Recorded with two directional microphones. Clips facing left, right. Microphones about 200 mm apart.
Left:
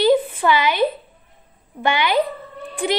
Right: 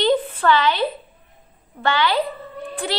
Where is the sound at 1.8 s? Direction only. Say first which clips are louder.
Left 1 dB; 15° left (ahead or behind).